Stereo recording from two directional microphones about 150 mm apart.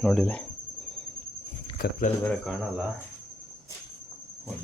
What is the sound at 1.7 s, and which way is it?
Speech, 75° left (ahead or behind).